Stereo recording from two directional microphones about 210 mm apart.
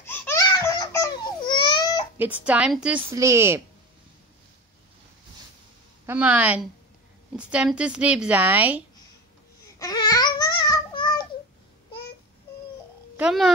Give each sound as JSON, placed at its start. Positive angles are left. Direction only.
{"t": 0.0, "sound": "baby laughter", "side_deg": 10}
{"t": 0.5, "sound": "baby cry", "side_deg": 15}
{"t": 2.1, "sound": "a woman's voice", "side_deg": -10}
{"t": 6.0, "sound": "a woman's voice", "side_deg": -5}
{"t": 9.8, "sound": "babbling", "side_deg": 15}
{"t": 13.2, "sound": "speech", "side_deg": 0}